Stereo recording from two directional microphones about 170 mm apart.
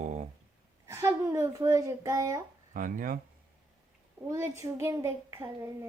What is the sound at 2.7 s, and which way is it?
Speech, 55° right (ahead or behind).